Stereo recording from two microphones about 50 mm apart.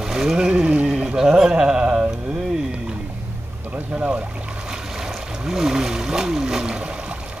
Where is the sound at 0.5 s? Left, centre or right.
Right.